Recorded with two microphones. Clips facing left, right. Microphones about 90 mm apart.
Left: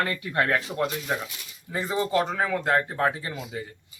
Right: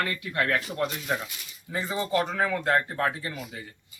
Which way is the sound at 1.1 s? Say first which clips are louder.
Left 1 dB; 5° left (ahead or behind).